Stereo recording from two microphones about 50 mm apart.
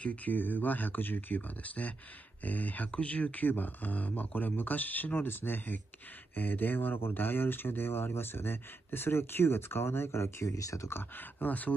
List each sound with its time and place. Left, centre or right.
0.0 s speech: left
10.9 s speech: left
11.3 s speech: left